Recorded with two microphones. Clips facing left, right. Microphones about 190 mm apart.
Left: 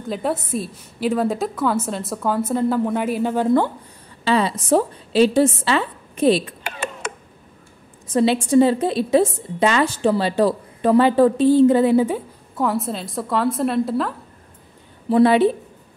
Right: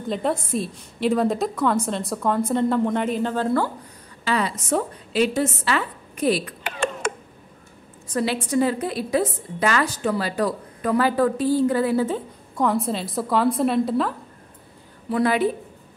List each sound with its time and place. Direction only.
0.1 s a woman's voice: 5° left (ahead or behind); by 6.5 s 25° left (ahead or behind)
8.1 s a woman's voice: 25° left (ahead or behind)
12.5 s a woman's voice: centre (ahead or behind)
15.0 s a woman's voice: 30° left (ahead or behind)